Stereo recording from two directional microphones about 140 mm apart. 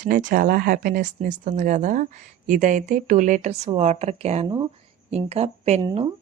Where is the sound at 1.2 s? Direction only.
65° right (ahead or behind).